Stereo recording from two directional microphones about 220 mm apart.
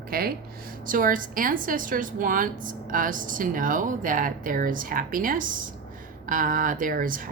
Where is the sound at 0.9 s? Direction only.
40° right (ahead or behind).